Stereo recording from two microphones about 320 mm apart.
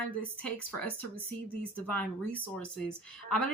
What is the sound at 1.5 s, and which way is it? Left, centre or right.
A woman's voice, centre.